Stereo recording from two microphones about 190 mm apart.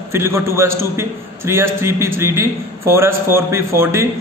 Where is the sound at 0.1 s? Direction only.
15° right (ahead or behind).